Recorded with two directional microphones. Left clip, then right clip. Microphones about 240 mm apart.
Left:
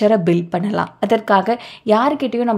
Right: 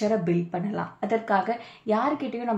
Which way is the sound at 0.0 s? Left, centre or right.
Left.